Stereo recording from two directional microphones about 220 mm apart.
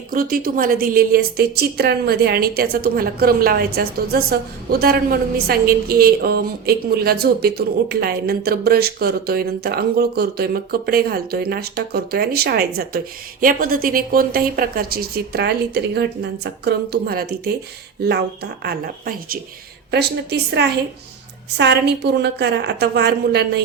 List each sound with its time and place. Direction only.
0.1 s a woman's voice: 40° right (ahead or behind)